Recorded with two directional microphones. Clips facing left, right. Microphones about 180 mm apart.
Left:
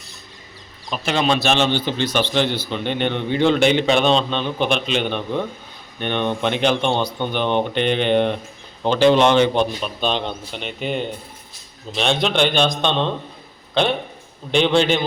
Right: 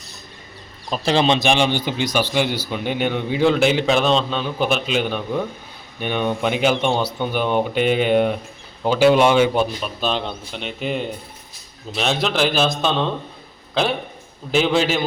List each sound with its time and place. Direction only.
0.9 s speech: 30° right (ahead or behind)
1.4 s a man's voice: 15° right (ahead or behind)
14.5 s a man's voice: 5° right (ahead or behind)